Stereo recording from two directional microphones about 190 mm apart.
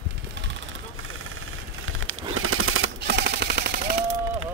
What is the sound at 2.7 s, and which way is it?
Machine gun, 75° right (ahead or behind).